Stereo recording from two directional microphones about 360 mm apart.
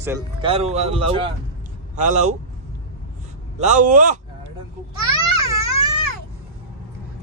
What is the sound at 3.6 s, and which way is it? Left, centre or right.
Speech, right.